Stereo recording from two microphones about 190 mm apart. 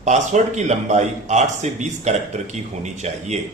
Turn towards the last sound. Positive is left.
turn(degrees=-35)  # may be behind; listen again after turning